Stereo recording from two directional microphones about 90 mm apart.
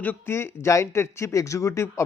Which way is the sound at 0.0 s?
25° left (ahead or behind).